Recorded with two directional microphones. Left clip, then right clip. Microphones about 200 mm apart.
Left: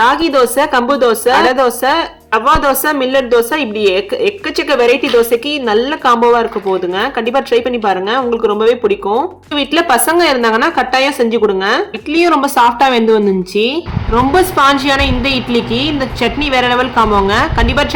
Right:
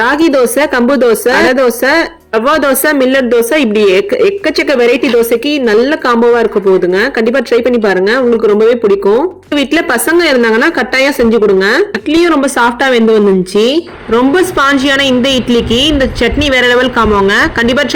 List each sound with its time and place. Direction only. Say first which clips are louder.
0.0 s a woman's voice: right 1 dB; 20° right (ahead or behind)
9.6 s a woman's voice: even; 15° right (ahead or behind)
13.6 s a woman's voice: right 4 dB; 25° right (ahead or behind)